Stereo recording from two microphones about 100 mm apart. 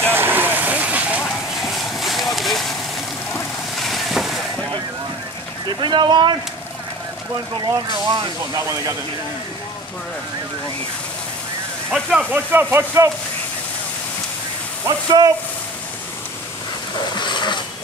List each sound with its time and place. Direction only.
0.0 s vehicle: 20° right (ahead or behind)
1.6 s vehicle: centre (ahead or behind)
3.8 s vehicle: centre (ahead or behind)
5.8 s speech: 50° right (ahead or behind)
7.6 s speech: 50° right (ahead or behind)
11.9 s speech: 10° right (ahead or behind); by 13.1 s 25° right (ahead or behind)
14.9 s speech: 45° right (ahead or behind)
17.0 s a sound: 50° left (ahead or behind)